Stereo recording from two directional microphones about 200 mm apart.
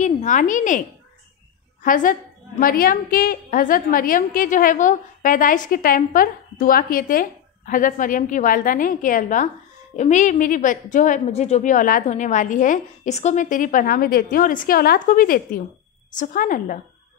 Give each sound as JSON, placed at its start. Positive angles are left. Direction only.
{"t": 0.0, "sound": "a woman's voice", "side_deg": 35}